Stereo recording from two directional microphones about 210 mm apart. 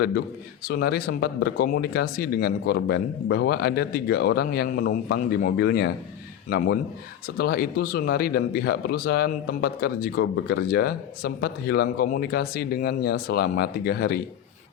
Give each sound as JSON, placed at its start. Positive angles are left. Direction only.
{"t": 0.7, "sound": "a man's voice", "side_deg": 50}
{"t": 7.3, "sound": "a man's voice", "side_deg": 45}